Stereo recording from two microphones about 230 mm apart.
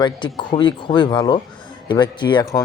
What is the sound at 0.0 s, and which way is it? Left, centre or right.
Speech, centre.